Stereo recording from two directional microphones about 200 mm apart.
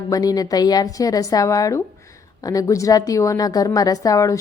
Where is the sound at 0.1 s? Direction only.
20° left (ahead or behind).